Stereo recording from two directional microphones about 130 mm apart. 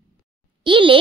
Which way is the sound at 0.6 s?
40° right (ahead or behind).